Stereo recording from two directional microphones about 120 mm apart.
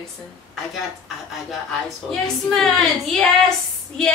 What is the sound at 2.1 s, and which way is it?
A woman's voice, centre (ahead or behind).